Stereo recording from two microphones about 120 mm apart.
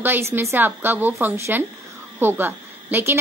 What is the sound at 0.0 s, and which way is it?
A woman's voice, 20° right (ahead or behind).